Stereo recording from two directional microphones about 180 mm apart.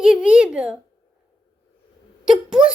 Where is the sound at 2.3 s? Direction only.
5° right (ahead or behind).